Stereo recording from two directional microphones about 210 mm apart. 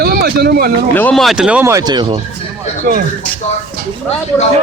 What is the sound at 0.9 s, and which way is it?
Speech, 5° left (ahead or behind).